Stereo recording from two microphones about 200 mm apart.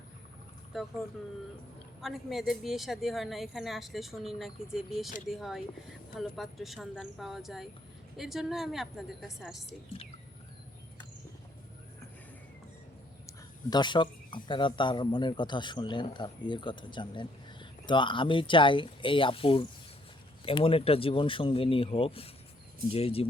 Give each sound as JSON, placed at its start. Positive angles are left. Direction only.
{"t": 2.0, "sound": "a woman's voice", "side_deg": 0}
{"t": 13.2, "sound": "speech", "side_deg": 20}